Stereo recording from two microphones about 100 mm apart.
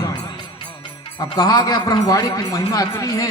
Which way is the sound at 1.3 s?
40° left (ahead or behind).